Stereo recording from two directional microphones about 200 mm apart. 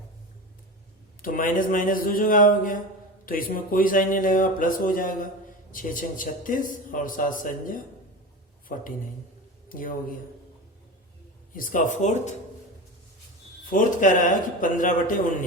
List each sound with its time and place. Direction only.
1.2 s a man's voice: 40° left (ahead or behind)
9.6 s a man's voice: 45° left (ahead or behind)
11.5 s a man's voice: 45° left (ahead or behind)
13.7 s a man's voice: 40° left (ahead or behind)